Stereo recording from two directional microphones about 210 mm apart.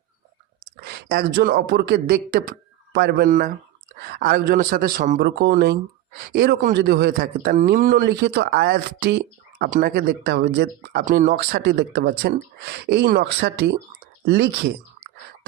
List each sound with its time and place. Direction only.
0.9 s speech: 50° right (ahead or behind)
3.2 s speech: 40° right (ahead or behind)
5.2 s speech: 50° right (ahead or behind)
9.6 s speech: 40° right (ahead or behind)